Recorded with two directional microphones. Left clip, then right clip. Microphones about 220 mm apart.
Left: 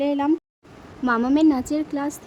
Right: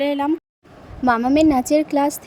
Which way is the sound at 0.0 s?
10° right (ahead or behind).